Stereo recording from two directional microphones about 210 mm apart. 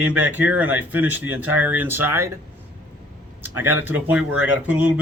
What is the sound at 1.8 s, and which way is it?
Speech, 10° right (ahead or behind).